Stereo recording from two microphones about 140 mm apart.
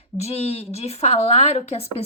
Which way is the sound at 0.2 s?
50° left (ahead or behind).